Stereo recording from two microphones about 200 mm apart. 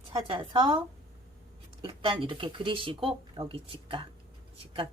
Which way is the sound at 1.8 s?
25° right (ahead or behind).